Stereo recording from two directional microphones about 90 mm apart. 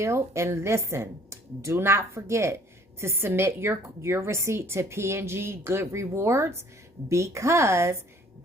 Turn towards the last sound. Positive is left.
turn(degrees=-30)  # may be behind; listen again after turning